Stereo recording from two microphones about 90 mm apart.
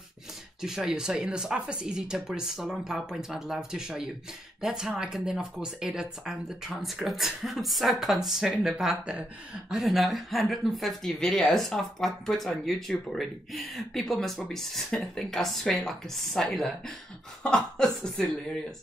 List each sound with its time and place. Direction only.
0.6 s speech: 5° right (ahead or behind)